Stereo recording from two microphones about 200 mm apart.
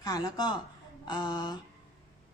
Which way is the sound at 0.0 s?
20° left (ahead or behind).